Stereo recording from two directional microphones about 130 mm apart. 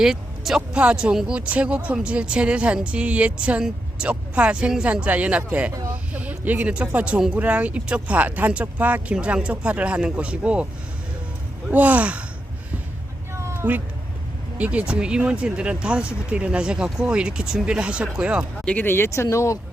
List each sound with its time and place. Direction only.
0.0 s speech: 5° right (ahead or behind)
5.9 s a sound: 10° right (ahead or behind)
6.8 s speech: 10° right (ahead or behind)
11.7 s speech: 10° right (ahead or behind)
13.3 s cat: 20° right (ahead or behind)
14.6 s speech: 10° right (ahead or behind)
18.6 s speech: 10° left (ahead or behind)